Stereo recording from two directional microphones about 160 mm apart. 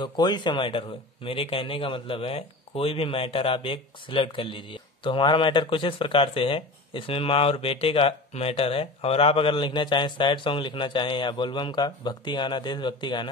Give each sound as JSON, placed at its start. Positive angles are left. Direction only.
{"t": 0.0, "sound": "speech", "side_deg": 30}